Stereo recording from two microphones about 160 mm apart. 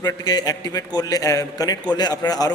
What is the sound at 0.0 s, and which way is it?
A man's voice, 25° left (ahead or behind).